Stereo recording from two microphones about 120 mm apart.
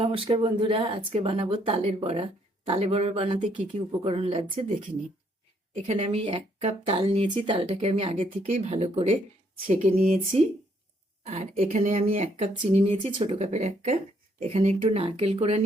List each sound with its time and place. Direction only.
0.0 s speech: 50° right (ahead or behind)
5.7 s speech: 60° right (ahead or behind)
8.7 s speech: 60° right (ahead or behind)
9.6 s speech: 90° right
11.3 s speech: 65° right (ahead or behind)